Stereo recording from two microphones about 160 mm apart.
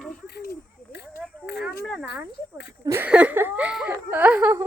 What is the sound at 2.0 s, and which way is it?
Speech, 90° left.